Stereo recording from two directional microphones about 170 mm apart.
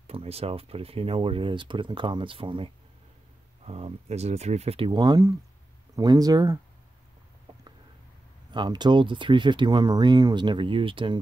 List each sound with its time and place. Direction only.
0.0 s speech: 35° right (ahead or behind); by 6.6 s 20° right (ahead or behind)
8.5 s speech: 25° right (ahead or behind)